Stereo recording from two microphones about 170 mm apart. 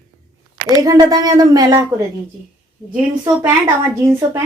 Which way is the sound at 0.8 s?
20° right (ahead or behind).